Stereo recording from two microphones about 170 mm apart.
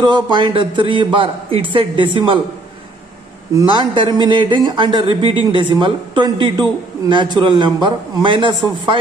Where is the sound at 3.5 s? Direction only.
30° right (ahead or behind).